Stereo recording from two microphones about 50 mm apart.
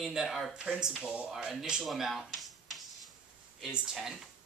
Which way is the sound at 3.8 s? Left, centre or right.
Centre.